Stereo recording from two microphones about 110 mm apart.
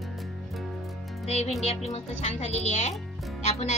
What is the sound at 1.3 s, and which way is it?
A woman's voice, 85° left.